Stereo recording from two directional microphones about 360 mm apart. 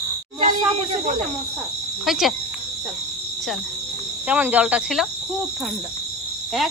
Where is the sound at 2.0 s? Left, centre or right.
Centre.